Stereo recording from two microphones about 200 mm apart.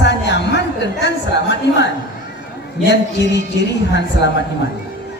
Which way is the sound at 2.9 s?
60° left (ahead or behind).